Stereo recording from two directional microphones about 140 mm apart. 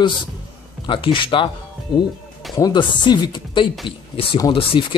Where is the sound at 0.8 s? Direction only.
35° left (ahead or behind).